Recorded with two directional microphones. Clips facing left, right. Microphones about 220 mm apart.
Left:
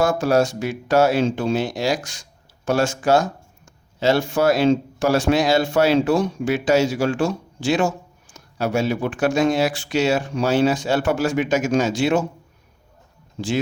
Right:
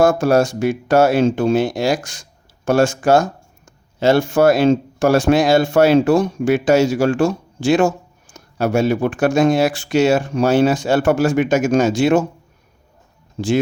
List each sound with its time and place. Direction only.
0.0 s speech: 45° right (ahead or behind)